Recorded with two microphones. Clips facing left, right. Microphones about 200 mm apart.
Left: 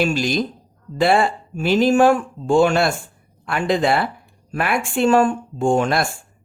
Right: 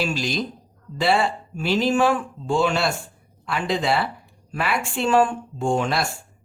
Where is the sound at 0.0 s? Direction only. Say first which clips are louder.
Left 5 dB; 50° left (ahead or behind).